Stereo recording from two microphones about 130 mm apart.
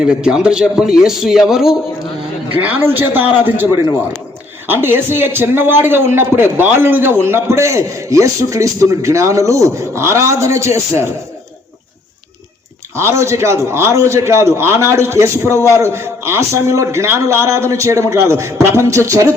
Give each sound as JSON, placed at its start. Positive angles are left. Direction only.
{"t": 0.0, "sound": "a man's voice", "side_deg": -5}
{"t": 13.0, "sound": "a man's voice", "side_deg": -20}